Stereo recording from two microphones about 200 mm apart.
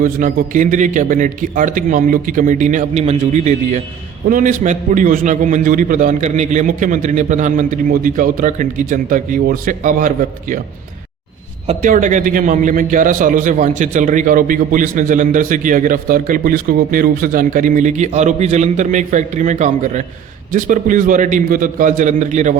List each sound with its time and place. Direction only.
0.0 s a man's voice: 40° right (ahead or behind)
11.6 s a man's voice: 35° right (ahead or behind)